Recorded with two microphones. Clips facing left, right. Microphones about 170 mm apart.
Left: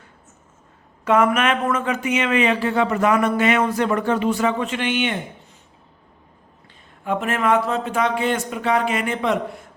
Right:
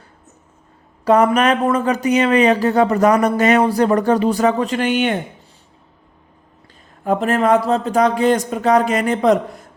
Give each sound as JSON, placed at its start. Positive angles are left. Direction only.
{"t": 1.0, "sound": "speech", "side_deg": -35}
{"t": 7.0, "sound": "speech", "side_deg": -40}